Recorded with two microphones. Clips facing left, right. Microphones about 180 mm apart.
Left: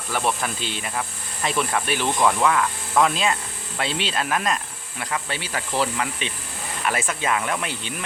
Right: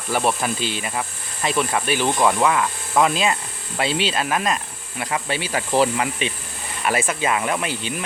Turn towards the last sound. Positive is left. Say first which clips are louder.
# right 3 dB
turn(degrees=-5)  # may be behind; listen again after turning